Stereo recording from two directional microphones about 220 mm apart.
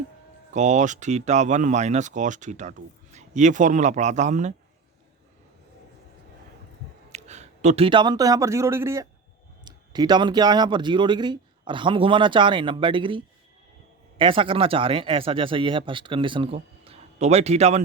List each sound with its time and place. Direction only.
0.5 s speech: 35° right (ahead or behind)
7.1 s a man's voice: 30° right (ahead or behind)